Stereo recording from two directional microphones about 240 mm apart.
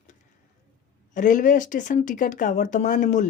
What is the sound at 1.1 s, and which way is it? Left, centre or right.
Speech, left.